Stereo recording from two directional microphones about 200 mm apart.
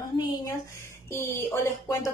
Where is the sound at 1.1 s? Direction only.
15° left (ahead or behind).